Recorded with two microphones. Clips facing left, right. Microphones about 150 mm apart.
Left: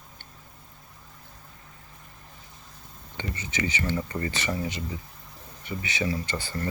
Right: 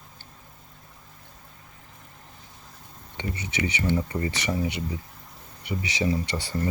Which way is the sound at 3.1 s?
15° right (ahead or behind).